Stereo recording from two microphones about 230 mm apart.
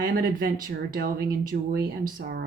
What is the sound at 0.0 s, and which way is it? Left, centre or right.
Speech, right.